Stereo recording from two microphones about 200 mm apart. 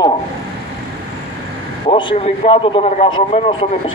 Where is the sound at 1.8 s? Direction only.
25° left (ahead or behind).